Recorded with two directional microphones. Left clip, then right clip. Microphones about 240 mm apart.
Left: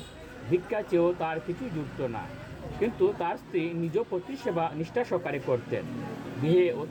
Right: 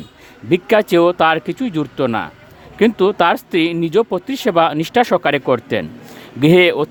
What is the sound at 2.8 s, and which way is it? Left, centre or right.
Speech, right.